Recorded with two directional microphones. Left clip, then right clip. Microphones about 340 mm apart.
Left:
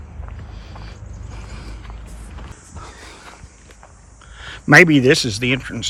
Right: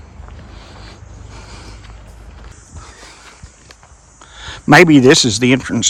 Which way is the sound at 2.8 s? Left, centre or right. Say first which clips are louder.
Even; centre.